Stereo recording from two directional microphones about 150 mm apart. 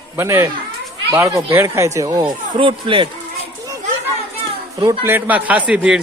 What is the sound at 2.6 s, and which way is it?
Speech, 35° right (ahead or behind).